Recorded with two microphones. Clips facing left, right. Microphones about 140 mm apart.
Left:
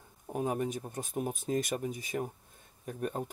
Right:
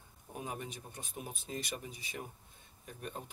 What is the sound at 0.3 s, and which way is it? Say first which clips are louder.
Speech: left 10 dB; 45° left (ahead or behind).